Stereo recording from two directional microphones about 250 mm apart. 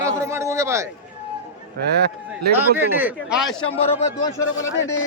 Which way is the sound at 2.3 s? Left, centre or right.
Centre.